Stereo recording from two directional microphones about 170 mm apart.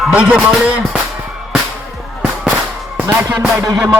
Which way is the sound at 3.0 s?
10° right (ahead or behind).